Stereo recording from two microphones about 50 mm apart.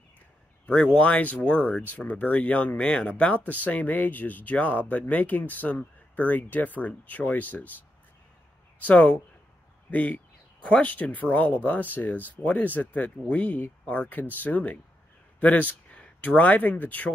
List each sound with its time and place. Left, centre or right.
0.9 s speech: left
3.6 s speech: left
8.8 s speech: left
15.9 s speech: left